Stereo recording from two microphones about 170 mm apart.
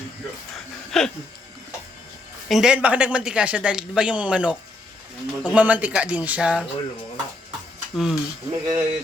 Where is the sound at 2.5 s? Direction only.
5° right (ahead or behind).